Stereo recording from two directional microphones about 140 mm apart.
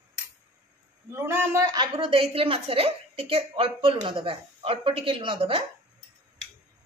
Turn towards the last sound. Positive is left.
turn(degrees=-40)  # may be behind; listen again after turning